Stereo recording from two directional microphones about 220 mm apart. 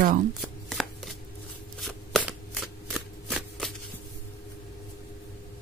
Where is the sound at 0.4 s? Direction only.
Centre (ahead or behind).